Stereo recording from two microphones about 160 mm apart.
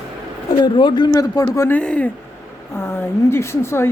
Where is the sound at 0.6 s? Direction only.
30° left (ahead or behind).